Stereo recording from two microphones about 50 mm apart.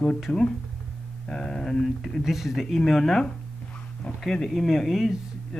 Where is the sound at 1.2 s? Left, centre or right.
Centre.